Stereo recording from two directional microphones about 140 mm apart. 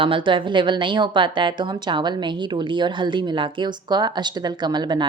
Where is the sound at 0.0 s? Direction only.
40° right (ahead or behind).